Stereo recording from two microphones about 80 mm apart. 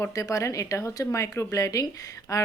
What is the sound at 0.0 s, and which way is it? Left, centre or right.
A woman's voice, left.